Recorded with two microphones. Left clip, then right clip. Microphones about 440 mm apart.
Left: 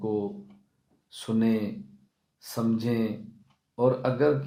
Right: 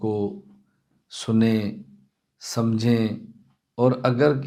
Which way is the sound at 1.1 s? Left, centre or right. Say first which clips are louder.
Right 5 dB; right.